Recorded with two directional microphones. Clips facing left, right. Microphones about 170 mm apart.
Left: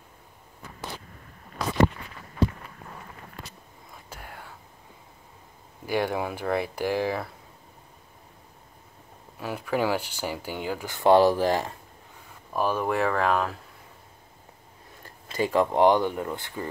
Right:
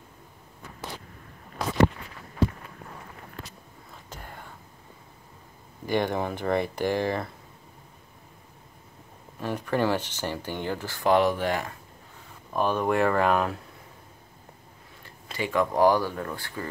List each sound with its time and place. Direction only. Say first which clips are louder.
3.9 s whispering: even; 5° left (ahead or behind)
5.9 s speech: right 1 dB; 5° left (ahead or behind)
9.4 s speech: right 1 dB; 5° left (ahead or behind); by 11.7 s 35° left (ahead or behind)
12.5 s speech: right 1 dB; 5° left (ahead or behind)
15.0 s speech: left 4 dB; 40° left (ahead or behind); by 16.6 s 20° left (ahead or behind)